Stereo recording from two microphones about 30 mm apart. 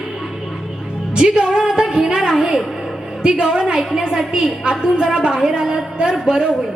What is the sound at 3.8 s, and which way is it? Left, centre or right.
A woman's voice, centre.